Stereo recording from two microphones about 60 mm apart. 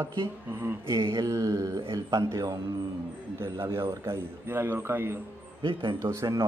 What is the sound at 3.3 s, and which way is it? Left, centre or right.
A man's voice, right.